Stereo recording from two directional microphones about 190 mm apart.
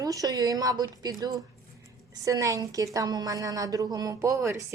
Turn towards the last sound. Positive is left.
turn(degrees=-15)  # may be behind; listen again after turning